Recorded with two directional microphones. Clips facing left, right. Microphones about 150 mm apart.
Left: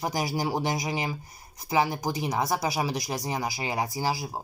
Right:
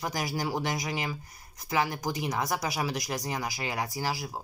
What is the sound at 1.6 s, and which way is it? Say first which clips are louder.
Speech: left 3 dB; 5° left (ahead or behind).